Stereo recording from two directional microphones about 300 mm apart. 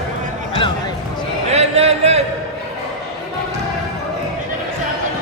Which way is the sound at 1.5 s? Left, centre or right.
Right.